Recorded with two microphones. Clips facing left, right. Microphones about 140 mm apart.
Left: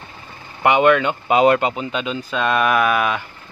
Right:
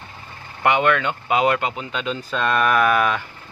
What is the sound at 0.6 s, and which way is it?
Speech, 15° left (ahead or behind).